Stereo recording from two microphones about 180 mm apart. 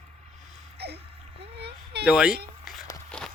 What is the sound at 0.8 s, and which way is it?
Gasp, 65° right (ahead or behind).